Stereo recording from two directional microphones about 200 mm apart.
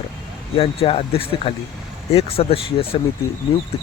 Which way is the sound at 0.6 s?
30° left (ahead or behind).